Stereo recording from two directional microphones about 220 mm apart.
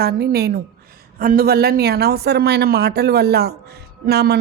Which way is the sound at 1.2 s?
40° right (ahead or behind).